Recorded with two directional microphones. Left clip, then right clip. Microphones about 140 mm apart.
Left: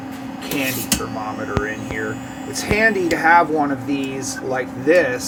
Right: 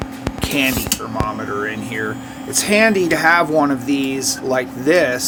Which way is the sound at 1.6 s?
80° right.